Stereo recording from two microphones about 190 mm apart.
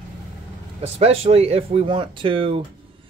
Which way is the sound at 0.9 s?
35° right (ahead or behind).